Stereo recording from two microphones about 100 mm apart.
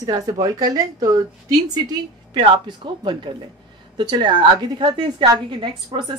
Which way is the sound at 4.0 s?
55° right (ahead or behind).